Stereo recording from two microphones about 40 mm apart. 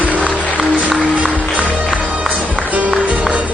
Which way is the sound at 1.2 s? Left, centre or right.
Right.